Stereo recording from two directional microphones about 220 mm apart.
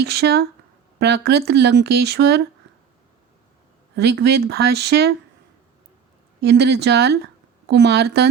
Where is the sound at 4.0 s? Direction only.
50° right (ahead or behind).